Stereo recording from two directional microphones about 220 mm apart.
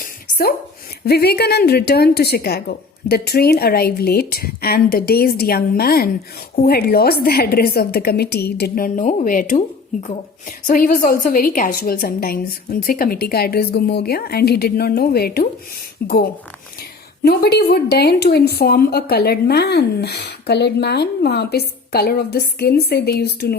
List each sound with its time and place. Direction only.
0.0 s a sound: 45° left (ahead or behind)
1.0 s a woman's voice: 45° left (ahead or behind)
10.7 s a woman's voice: 40° left (ahead or behind)
17.2 s a woman's voice: 45° left (ahead or behind)